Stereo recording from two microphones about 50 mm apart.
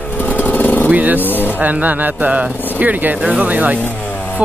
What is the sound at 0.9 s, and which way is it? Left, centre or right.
Vehicle, right.